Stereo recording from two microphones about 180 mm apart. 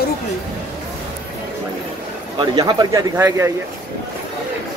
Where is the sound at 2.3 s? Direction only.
25° right (ahead or behind).